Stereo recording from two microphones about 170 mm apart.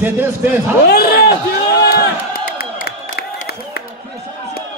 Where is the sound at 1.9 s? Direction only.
65° left (ahead or behind).